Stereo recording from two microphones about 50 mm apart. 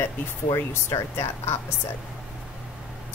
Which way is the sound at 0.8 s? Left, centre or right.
Left.